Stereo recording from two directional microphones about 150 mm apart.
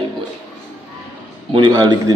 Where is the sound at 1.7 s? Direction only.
25° right (ahead or behind).